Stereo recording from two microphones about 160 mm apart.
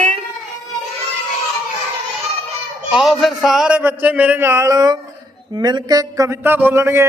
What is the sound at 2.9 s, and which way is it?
A man's voice, centre (ahead or behind).